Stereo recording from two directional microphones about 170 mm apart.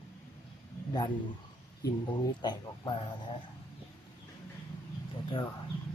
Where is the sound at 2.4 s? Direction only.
25° left (ahead or behind).